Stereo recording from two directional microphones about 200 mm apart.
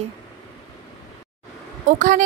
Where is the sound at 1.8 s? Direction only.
40° right (ahead or behind).